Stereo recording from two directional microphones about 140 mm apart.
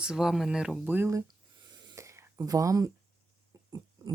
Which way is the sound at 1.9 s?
20° right (ahead or behind).